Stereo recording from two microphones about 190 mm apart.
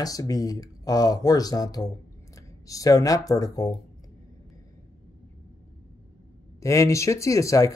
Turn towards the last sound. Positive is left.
turn(degrees=15)  # may be behind; listen again after turning